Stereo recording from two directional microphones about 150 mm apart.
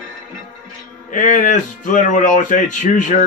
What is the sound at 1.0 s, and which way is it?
A man's voice, 55° left (ahead or behind).